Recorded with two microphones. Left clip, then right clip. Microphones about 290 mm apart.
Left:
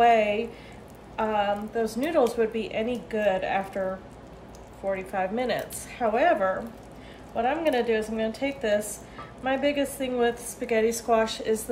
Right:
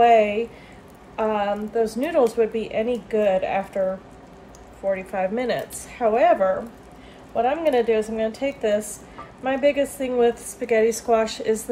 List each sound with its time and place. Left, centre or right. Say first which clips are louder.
0.0 s speech: right 4 dB; right
4.9 s speech: right 2 dB; right